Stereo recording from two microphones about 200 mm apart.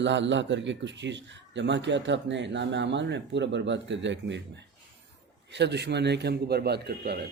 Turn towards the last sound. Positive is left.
turn(degrees=-50)  # may be behind; listen again after turning